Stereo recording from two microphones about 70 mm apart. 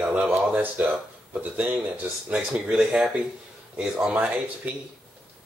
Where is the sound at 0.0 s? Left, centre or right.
Centre.